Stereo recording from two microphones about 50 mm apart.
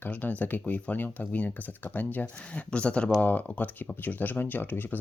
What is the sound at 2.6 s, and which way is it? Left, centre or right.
Speech, left.